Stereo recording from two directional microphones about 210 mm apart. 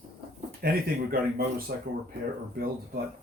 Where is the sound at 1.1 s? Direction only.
45° right (ahead or behind).